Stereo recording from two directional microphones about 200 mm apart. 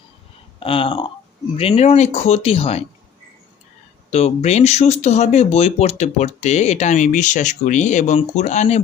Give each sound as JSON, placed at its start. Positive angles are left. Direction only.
{"t": 0.6, "sound": "speech", "side_deg": 25}
{"t": 4.1, "sound": "speech", "side_deg": 30}